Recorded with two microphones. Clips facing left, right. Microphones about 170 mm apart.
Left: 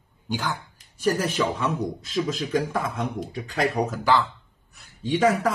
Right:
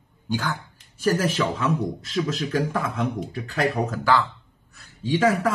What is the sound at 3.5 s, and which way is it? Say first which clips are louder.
Speech: even; 15° left (ahead or behind).